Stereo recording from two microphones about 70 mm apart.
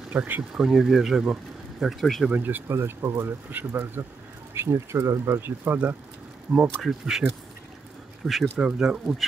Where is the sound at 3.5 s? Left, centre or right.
Right.